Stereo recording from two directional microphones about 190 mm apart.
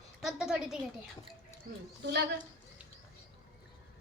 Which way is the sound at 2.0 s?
60° right (ahead or behind).